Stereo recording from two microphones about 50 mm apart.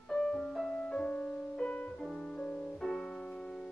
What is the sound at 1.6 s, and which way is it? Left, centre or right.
Music, left.